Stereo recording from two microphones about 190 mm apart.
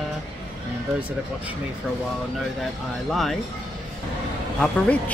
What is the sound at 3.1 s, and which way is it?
Speech, centre (ahead or behind).